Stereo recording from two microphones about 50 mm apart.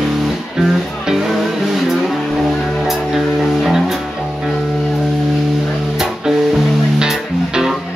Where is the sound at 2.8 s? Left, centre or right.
Centre.